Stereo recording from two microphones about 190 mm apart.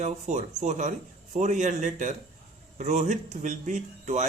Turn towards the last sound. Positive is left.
turn(degrees=-40)  # may be behind; listen again after turning